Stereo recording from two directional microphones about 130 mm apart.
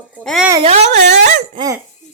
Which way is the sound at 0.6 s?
55° right (ahead or behind).